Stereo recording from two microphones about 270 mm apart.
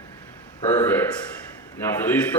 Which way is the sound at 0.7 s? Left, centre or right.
Centre.